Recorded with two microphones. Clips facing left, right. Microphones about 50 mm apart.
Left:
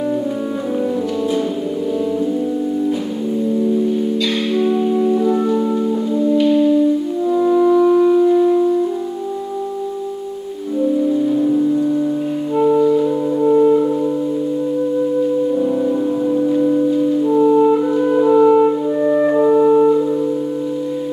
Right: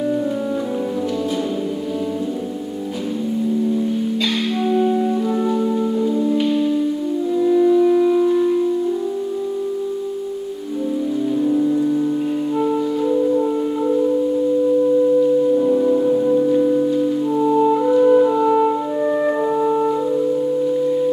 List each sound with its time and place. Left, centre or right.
5.1 s music: centre
7.2 s music: centre
7.9 s music: centre
11.3 s music: centre
15.5 s music: centre